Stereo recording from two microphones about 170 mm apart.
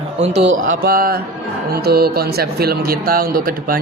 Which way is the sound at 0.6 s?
60° right (ahead or behind).